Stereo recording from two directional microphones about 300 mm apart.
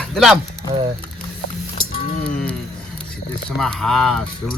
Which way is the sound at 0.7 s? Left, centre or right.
Centre.